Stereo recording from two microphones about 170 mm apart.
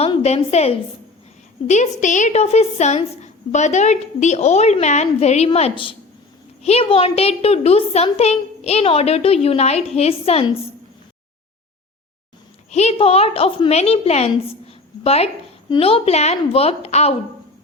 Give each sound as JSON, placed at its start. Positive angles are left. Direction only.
{"t": 0.0, "sound": "a woman's voice", "side_deg": 35}
{"t": 12.7, "sound": "a woman's voice", "side_deg": 40}
{"t": 14.7, "sound": "a sound", "side_deg": 35}
{"t": 15.7, "sound": "a woman's voice", "side_deg": 35}